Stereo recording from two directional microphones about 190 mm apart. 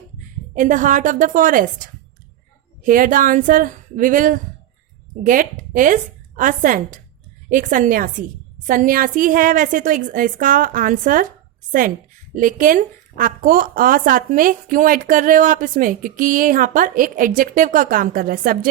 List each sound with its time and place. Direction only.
0.5 s a woman's voice: 40° right (ahead or behind)
12.3 s a woman's voice: 45° right (ahead or behind)